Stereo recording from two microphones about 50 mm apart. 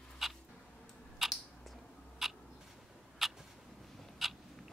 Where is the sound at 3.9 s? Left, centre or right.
Centre.